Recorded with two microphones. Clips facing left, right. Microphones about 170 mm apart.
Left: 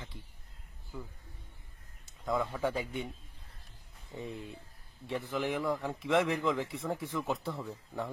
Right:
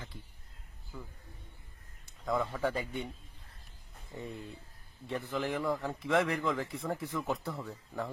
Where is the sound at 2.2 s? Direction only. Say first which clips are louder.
Even; centre (ahead or behind).